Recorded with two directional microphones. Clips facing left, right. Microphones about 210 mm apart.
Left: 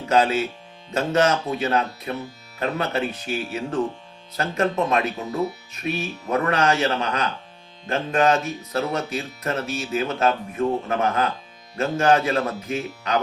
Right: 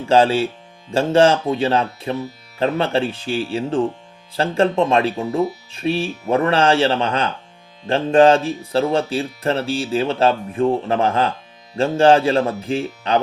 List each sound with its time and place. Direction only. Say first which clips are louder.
0.1 s speech: right 5 dB; 30° right (ahead or behind)